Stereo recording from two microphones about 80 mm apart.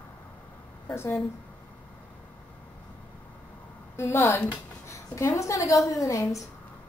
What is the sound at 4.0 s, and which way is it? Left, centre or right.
A woman's voice, left.